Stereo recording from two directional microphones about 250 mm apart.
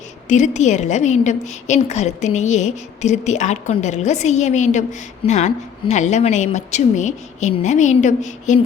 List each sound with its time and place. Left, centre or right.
0.3 s a woman's voice: left